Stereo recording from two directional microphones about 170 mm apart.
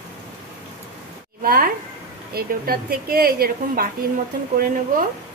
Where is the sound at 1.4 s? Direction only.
60° right (ahead or behind).